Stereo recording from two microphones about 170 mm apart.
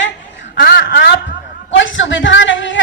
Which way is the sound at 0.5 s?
65° left (ahead or behind).